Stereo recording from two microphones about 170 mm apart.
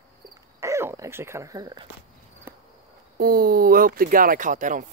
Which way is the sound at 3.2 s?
60° right (ahead or behind).